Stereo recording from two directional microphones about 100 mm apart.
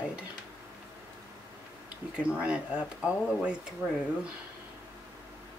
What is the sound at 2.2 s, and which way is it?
Speech, 10° right (ahead or behind).